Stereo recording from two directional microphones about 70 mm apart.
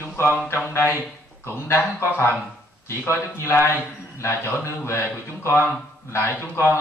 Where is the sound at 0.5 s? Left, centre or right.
Left.